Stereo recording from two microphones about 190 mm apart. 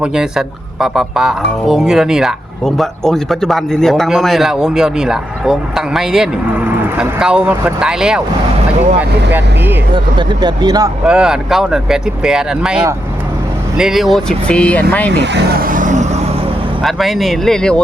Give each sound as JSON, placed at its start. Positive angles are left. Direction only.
{"t": 0.0, "sound": "speech", "side_deg": -5}
{"t": 9.9, "sound": "speech", "side_deg": -25}
{"t": 11.0, "sound": "speech", "side_deg": -5}
{"t": 15.1, "sound": "speech", "side_deg": -65}
{"t": 16.8, "sound": "speech", "side_deg": 0}